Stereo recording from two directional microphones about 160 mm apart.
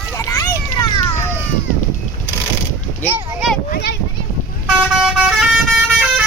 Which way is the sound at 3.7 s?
90° left.